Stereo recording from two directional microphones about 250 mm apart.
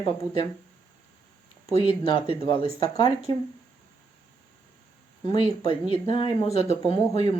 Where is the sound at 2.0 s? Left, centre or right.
Left.